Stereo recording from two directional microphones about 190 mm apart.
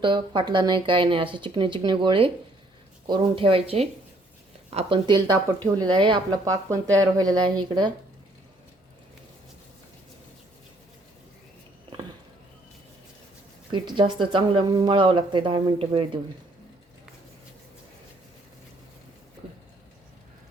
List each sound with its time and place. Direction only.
0.0 s speech: 25° right (ahead or behind)
13.7 s speech: 25° right (ahead or behind)